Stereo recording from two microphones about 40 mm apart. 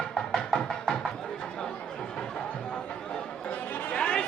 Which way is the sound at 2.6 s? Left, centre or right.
Left.